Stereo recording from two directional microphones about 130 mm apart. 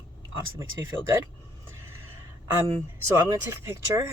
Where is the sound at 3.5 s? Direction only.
25° right (ahead or behind).